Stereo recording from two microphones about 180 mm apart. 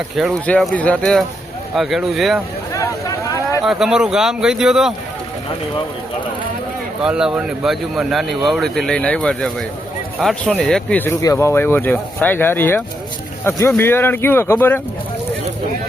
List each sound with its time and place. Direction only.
0.2 s speech: 5° left (ahead or behind)
2.7 s vehicle: 20° left (ahead or behind)
3.6 s speech: centre (ahead or behind)
7.0 s speech: 5° right (ahead or behind); by 14.8 s 10° left (ahead or behind)